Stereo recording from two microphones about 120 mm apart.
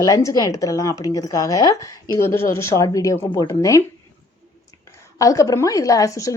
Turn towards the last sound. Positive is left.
turn(degrees=30)  # may be behind; listen again after turning